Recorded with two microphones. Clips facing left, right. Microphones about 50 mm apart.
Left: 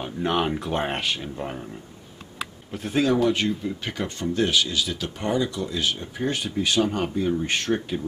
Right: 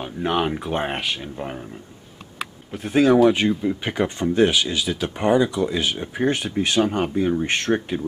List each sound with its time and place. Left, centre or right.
0.0 s speech: centre
2.3 s a sound: centre
3.3 s speech: right